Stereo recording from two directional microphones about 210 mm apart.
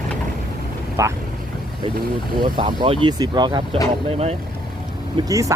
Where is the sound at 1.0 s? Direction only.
15° right (ahead or behind).